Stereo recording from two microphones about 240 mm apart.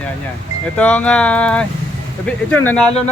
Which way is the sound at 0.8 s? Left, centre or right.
Centre.